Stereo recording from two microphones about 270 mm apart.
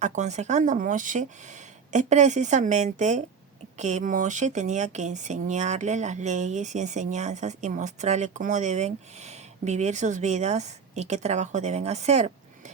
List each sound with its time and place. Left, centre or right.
0.0 s speech: right